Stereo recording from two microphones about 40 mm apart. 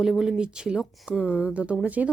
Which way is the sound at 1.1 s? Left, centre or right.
Left.